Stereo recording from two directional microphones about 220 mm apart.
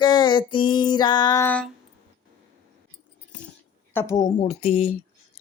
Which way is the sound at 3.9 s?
15° left (ahead or behind).